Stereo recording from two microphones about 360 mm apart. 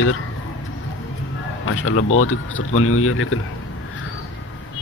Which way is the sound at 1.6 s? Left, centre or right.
Left.